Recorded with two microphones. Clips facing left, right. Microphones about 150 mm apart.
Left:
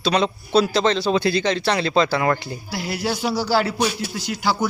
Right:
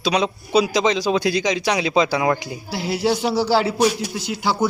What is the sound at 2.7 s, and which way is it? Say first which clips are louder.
A man's voice: right 5 dB; 25° right (ahead or behind).